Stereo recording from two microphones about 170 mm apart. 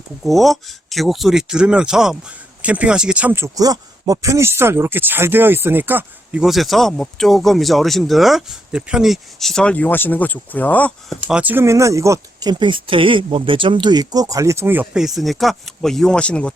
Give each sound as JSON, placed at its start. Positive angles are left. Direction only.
{"t": 0.3, "sound": "speech", "side_deg": 0}
{"t": 11.3, "sound": "speech", "side_deg": -10}